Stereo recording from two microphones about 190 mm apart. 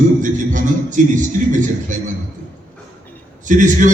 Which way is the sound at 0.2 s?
40° right (ahead or behind).